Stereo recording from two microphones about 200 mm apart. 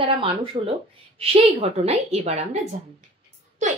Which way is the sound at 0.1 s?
25° right (ahead or behind).